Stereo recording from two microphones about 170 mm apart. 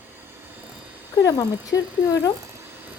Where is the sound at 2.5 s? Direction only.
10° right (ahead or behind).